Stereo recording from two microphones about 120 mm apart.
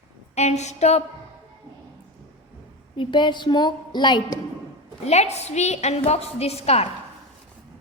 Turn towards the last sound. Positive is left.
turn(degrees=60)  # may be behind; listen again after turning